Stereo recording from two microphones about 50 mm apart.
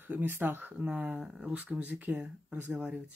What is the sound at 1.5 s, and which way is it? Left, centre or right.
Speech, right.